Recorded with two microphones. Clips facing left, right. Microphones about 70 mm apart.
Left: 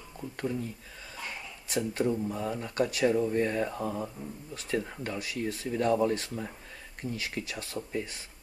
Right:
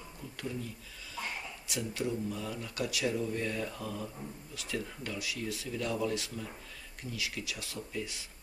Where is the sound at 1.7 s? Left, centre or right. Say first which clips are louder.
Left 6 dB; left.